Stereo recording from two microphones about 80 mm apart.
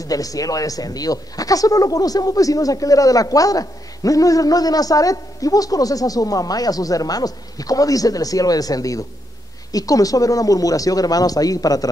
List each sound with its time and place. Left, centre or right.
0.0 s speech: left